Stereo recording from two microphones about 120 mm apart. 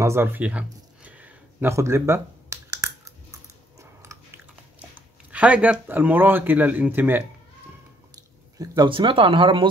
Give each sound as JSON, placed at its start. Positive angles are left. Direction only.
{"t": 0.0, "sound": "a sound", "side_deg": -20}
{"t": 3.8, "sound": "biting", "side_deg": -25}
{"t": 4.7, "sound": "speech", "side_deg": -10}
{"t": 8.5, "sound": "speech", "side_deg": -40}